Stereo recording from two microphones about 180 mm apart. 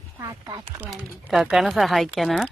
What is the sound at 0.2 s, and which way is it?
Speech, 20° right (ahead or behind).